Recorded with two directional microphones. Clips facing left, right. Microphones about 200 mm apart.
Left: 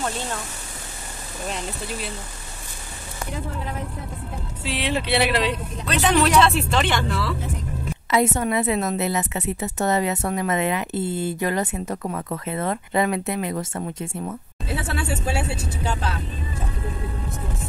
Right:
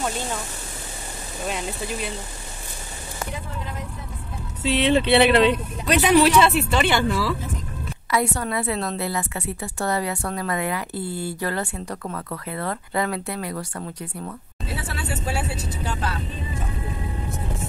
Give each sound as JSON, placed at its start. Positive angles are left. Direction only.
{"t": 4.6, "sound": "speech", "side_deg": -25}
{"t": 5.9, "sound": "speech", "side_deg": -15}
{"t": 8.1, "sound": "a woman's voice", "side_deg": 20}